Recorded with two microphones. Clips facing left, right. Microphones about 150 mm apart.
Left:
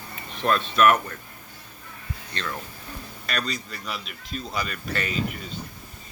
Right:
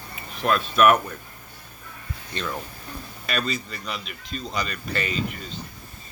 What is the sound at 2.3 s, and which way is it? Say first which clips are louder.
Speech: right 3 dB; 10° right (ahead or behind).